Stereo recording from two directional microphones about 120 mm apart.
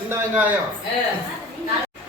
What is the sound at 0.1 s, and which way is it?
Speech, 15° right (ahead or behind).